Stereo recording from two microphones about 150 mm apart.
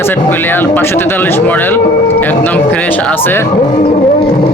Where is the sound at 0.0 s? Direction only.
15° left (ahead or behind).